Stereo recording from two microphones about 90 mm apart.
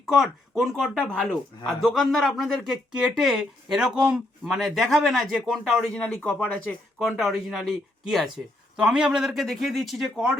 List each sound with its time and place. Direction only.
0.0 s speech: 5° right (ahead or behind)
0.8 s speech: 5° left (ahead or behind)
6.0 s speech: 10° left (ahead or behind)